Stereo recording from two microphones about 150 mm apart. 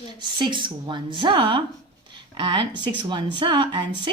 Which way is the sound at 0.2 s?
30° right (ahead or behind).